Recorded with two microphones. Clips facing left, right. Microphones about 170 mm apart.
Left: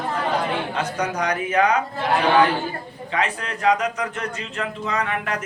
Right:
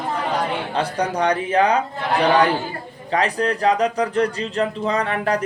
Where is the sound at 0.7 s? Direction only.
30° right (ahead or behind).